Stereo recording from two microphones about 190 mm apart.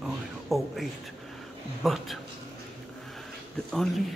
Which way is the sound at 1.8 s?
Centre (ahead or behind).